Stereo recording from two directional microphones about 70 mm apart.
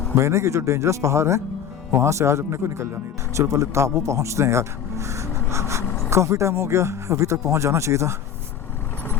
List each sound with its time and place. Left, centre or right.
0.2 s speech: right